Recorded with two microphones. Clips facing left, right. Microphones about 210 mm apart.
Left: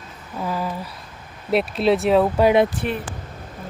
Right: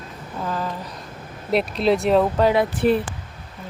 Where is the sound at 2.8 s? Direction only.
35° right (ahead or behind).